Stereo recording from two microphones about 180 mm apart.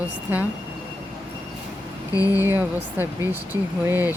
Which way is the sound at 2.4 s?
10° right (ahead or behind).